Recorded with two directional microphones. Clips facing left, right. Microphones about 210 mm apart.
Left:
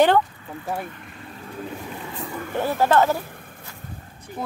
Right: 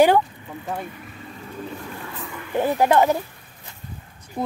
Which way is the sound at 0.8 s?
5° right (ahead or behind).